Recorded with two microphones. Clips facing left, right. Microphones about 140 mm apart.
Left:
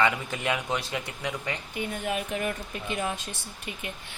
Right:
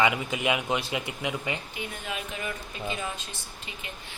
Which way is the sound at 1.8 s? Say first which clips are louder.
Left 5 dB; 50° left (ahead or behind).